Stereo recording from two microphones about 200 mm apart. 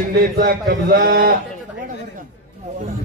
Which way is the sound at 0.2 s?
50° right (ahead or behind).